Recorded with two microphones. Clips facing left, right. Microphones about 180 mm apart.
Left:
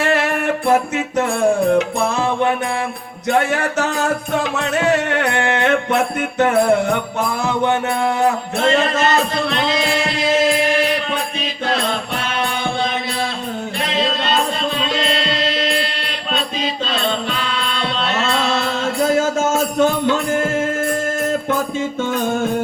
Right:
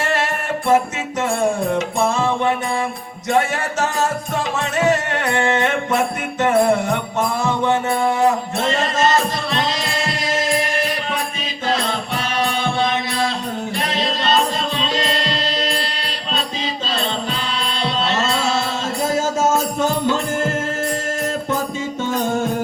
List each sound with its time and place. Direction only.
0.0 s music: 60° left (ahead or behind)
3.2 s music: 60° left (ahead or behind)
8.7 s music: 60° left (ahead or behind)
17.7 s music: 55° left (ahead or behind)